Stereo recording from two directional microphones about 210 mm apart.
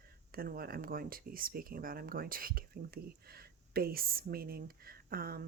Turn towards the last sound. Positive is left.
turn(degrees=-45)  # may be behind; listen again after turning